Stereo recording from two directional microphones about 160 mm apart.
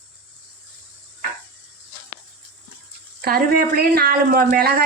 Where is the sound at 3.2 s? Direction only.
75° right (ahead or behind).